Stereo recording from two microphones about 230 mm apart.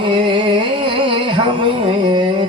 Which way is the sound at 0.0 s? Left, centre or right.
Right.